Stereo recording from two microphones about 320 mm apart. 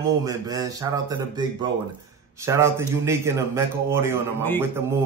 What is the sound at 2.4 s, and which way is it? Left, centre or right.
A man's voice, centre.